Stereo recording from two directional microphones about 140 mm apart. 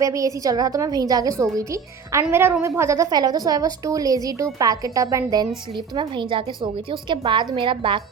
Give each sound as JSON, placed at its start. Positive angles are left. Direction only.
{"t": 0.0, "sound": "a woman's voice", "side_deg": -25}